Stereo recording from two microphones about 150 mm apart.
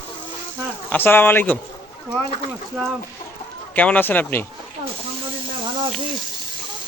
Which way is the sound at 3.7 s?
10° left (ahead or behind).